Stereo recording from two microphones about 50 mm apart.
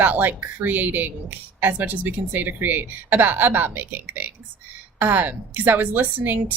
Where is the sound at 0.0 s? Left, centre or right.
Right.